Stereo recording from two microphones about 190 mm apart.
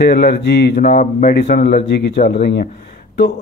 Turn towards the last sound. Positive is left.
turn(degrees=55)  # may be behind; listen again after turning